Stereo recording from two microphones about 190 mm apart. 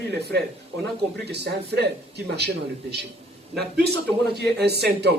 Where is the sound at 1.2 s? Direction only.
60° right (ahead or behind).